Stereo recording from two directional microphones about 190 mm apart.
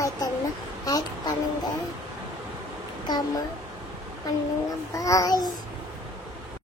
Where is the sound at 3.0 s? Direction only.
20° left (ahead or behind).